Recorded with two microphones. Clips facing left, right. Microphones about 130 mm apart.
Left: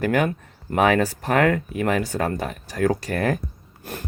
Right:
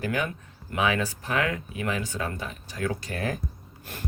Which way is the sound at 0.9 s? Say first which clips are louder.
Left 7 dB; 55° left (ahead or behind).